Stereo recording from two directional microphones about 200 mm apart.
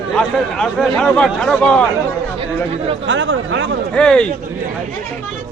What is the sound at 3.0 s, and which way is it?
Speech, 70° right (ahead or behind).